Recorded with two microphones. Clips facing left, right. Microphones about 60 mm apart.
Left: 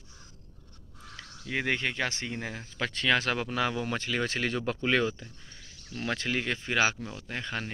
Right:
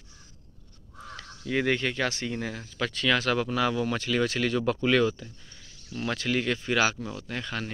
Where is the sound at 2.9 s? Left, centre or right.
Left.